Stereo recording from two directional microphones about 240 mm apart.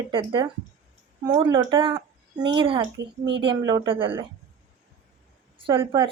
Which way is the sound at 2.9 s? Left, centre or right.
Right.